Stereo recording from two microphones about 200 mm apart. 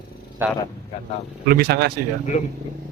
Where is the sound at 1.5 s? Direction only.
50° right (ahead or behind).